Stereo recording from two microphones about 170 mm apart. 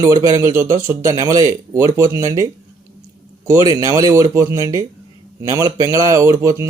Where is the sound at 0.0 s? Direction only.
20° right (ahead or behind).